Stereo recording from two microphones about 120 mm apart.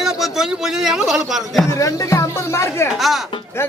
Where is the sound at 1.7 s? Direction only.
30° left (ahead or behind).